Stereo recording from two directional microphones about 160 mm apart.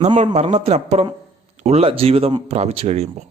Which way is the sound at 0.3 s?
40° right (ahead or behind).